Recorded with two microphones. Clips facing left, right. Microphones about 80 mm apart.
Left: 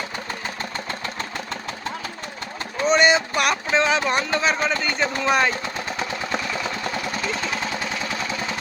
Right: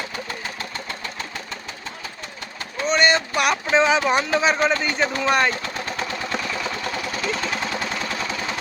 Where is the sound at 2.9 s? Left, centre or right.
Centre.